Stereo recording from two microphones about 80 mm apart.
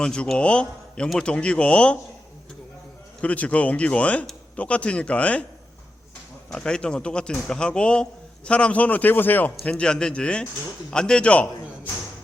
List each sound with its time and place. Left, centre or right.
0.0 s speech: centre
3.2 s speech: centre
6.5 s speech: centre